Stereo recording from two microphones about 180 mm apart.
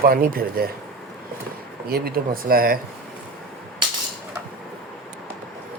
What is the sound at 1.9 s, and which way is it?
Speech, 60° right (ahead or behind).